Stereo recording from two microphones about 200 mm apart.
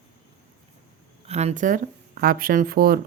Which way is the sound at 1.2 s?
30° right (ahead or behind).